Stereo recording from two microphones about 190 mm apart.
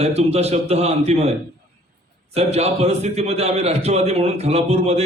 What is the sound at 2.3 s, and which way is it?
A man's voice, 35° right (ahead or behind).